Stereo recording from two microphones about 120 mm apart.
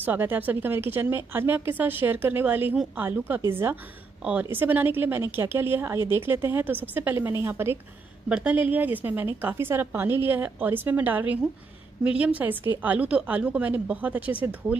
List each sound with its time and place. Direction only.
0.0 s a woman's voice: 15° right (ahead or behind)